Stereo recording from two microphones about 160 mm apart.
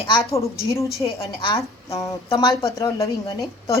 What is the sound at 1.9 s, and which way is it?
Speech, 20° left (ahead or behind).